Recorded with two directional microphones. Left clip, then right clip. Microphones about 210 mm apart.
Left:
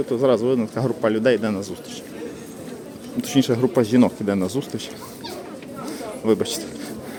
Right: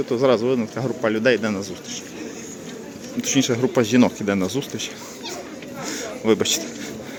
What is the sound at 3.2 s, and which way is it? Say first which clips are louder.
Speech: even; 10° left (ahead or behind).